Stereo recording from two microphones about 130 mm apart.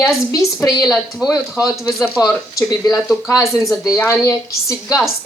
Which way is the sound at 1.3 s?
25° left (ahead or behind).